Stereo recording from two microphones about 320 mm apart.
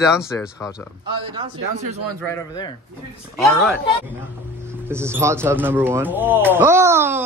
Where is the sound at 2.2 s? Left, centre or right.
Centre.